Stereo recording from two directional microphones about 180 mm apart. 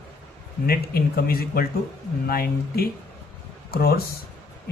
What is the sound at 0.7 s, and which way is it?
Speech, 55° left (ahead or behind).